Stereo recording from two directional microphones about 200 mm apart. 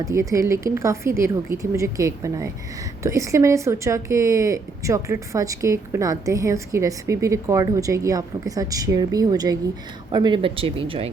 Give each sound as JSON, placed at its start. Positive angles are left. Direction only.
{"t": 0.0, "sound": "speech", "side_deg": -15}